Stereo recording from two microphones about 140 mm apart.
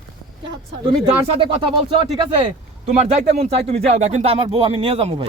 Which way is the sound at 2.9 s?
50° right (ahead or behind).